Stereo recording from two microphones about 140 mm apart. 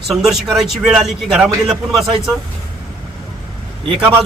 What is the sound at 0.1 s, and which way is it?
A man's voice, 5° right (ahead or behind).